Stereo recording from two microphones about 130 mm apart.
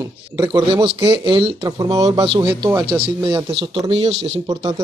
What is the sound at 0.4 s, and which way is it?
Speech, 30° right (ahead or behind).